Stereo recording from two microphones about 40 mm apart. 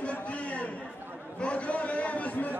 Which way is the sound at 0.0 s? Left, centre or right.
Left.